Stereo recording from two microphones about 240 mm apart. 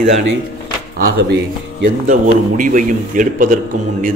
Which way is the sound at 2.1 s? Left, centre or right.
Right.